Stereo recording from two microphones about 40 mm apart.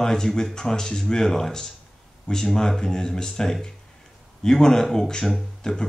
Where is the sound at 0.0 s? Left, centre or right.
Centre.